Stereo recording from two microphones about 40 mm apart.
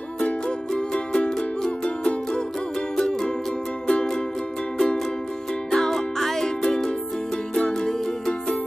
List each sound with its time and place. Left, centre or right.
0.7 s music: left
3.0 s music: centre